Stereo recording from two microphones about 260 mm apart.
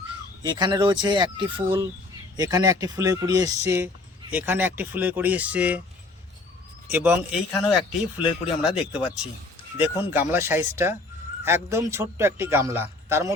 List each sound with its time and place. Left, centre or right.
0.4 s a man's voice: centre
6.9 s a man's voice: centre